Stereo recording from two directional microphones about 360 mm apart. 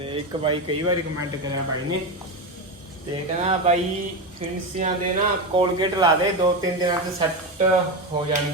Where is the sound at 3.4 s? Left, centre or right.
Centre.